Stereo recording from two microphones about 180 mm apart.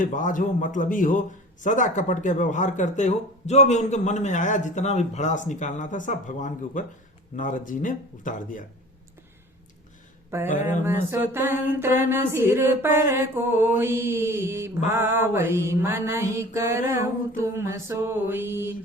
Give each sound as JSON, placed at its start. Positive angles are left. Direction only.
{"t": 0.0, "sound": "speech", "side_deg": 45}
{"t": 10.6, "sound": "mantra", "side_deg": -15}